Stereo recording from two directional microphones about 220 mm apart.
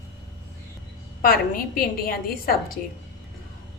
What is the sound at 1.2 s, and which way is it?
A woman's voice, 40° left (ahead or behind).